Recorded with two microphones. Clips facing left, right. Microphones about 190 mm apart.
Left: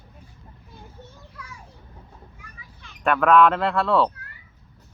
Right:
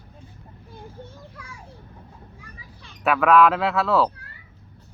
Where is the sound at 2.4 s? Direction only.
35° right (ahead or behind).